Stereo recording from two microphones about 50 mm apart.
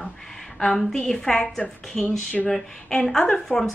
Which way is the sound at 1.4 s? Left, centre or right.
Left.